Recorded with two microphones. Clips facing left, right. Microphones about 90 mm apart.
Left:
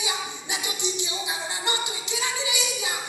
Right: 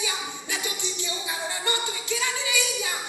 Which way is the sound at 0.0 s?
20° left (ahead or behind).